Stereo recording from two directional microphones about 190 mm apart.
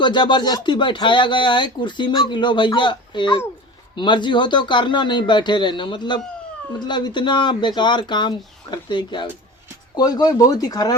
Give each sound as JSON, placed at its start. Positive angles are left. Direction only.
{"t": 0.0, "sound": "speech", "side_deg": 25}